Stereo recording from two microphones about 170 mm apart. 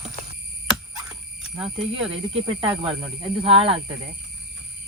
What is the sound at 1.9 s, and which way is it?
Speech, 35° right (ahead or behind).